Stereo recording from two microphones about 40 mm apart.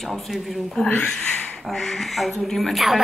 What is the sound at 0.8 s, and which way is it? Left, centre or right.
Speech, left.